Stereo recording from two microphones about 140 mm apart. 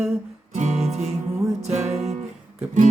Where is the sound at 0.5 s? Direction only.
55° right (ahead or behind).